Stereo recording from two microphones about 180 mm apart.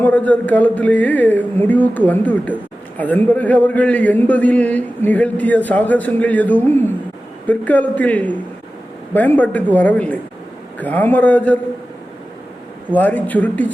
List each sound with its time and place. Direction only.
0.0 s a man's voice: 10° left (ahead or behind)
12.9 s a man's voice: 10° left (ahead or behind)